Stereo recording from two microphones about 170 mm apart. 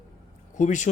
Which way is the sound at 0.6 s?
45° left (ahead or behind).